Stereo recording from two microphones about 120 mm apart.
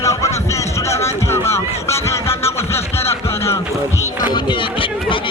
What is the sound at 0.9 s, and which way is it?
Music, 20° left (ahead or behind).